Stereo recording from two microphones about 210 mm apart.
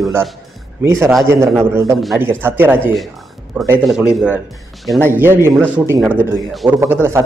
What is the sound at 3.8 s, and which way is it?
A man's voice, 5° right (ahead or behind).